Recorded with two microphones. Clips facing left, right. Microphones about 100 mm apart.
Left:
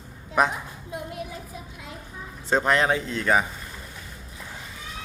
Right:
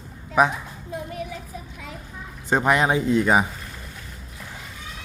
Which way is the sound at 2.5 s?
10° right (ahead or behind).